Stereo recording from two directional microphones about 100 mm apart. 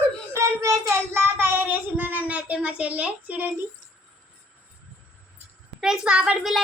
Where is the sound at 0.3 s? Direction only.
30° right (ahead or behind); by 3.5 s 15° right (ahead or behind).